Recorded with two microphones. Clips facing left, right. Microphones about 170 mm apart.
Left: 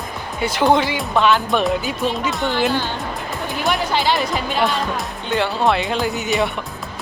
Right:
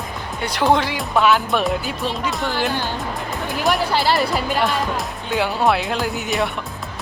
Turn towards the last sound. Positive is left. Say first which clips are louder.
# left 2 dB
turn(degrees=0)  # may be behind; listen again after turning